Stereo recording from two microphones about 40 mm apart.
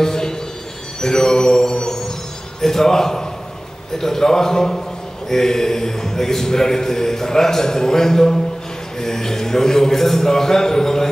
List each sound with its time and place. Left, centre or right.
0.0 s music: centre
1.0 s mantra: centre
2.6 s a sound: centre
4.0 s a man's voice: centre